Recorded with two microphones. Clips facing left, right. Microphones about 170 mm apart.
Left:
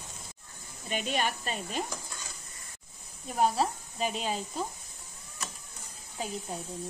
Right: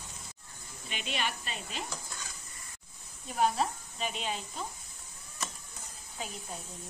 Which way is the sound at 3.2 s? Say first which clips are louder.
Left 2 dB; 40° left (ahead or behind).